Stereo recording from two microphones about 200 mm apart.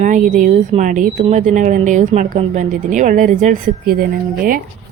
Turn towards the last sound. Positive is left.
turn(degrees=-45)  # may be behind; listen again after turning